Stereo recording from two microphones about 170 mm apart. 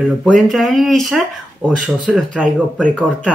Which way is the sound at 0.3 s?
Centre (ahead or behind).